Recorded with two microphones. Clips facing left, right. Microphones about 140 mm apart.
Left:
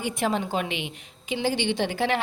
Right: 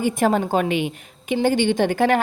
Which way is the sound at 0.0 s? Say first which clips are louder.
Right 7 dB; 45° right (ahead or behind).